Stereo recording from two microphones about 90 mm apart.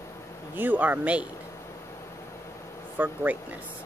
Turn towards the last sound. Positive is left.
turn(degrees=-15)  # may be behind; listen again after turning